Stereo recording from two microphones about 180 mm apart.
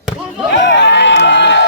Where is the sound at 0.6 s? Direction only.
85° left.